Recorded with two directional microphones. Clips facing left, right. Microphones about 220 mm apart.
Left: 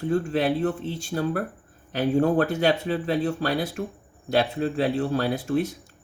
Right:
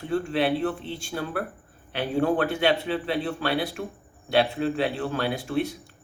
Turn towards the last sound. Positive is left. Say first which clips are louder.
# left 2 dB
turn(degrees=40)  # may be behind; listen again after turning